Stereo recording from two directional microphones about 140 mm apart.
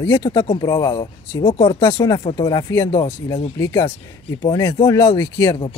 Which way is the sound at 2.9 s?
35° left (ahead or behind).